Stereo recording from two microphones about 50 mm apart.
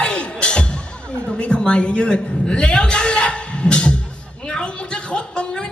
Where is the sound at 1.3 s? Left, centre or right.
Centre.